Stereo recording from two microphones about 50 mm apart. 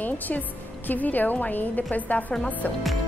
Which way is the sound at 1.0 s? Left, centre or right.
Left.